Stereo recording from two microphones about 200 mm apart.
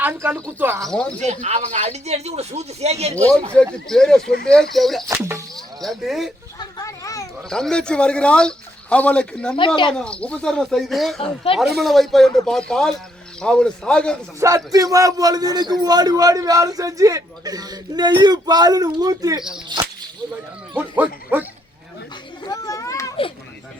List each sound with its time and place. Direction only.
0.0 s a man's voice: 10° right (ahead or behind)
1.2 s speech: 35° right (ahead or behind)
3.2 s speech: 5° left (ahead or behind)
5.0 s a man's voice: 15° right (ahead or behind)
5.5 s speech: centre (ahead or behind)
6.6 s a sound: 15° left (ahead or behind)
7.5 s speech: 5° left (ahead or behind)
9.6 s speech: 25° left (ahead or behind)
10.0 s speech: 5° left (ahead or behind)
14.3 s a man's voice: 15° right (ahead or behind)
19.7 s whip: 20° right (ahead or behind)
20.7 s a man's voice: 10° right (ahead or behind)
22.4 s children playing: 15° left (ahead or behind)